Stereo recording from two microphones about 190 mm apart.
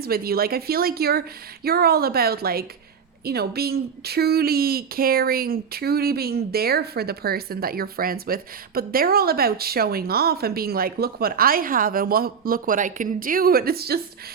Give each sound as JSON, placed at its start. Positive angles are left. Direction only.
{"t": 0.0, "sound": "speech", "side_deg": -55}